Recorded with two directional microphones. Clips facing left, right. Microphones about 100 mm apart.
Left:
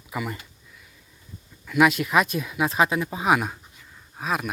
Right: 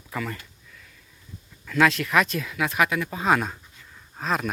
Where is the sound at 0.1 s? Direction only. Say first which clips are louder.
Left 1 dB; 15° left (ahead or behind).